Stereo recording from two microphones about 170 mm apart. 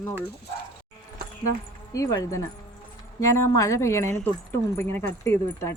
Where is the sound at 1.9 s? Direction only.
20° left (ahead or behind).